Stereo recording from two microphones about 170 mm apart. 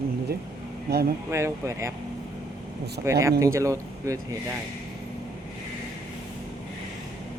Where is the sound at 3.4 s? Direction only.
20° right (ahead or behind).